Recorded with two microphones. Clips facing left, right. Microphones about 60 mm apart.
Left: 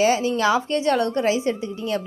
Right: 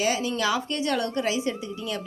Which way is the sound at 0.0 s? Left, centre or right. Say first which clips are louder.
Left 6 dB; left.